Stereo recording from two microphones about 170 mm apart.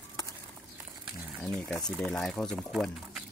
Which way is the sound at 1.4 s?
5° left (ahead or behind).